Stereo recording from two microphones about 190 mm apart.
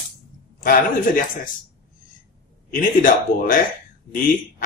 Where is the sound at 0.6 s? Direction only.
45° left (ahead or behind).